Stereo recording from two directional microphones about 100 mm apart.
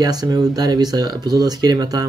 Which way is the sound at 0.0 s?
40° right (ahead or behind).